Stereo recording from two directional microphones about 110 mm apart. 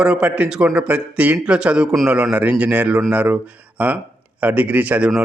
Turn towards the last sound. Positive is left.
turn(degrees=-10)  # may be behind; listen again after turning